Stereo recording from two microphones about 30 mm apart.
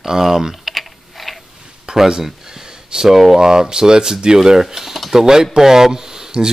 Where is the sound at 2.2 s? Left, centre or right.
Centre.